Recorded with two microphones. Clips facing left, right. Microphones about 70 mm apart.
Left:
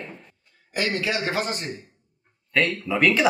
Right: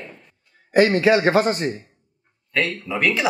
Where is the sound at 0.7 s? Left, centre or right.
Right.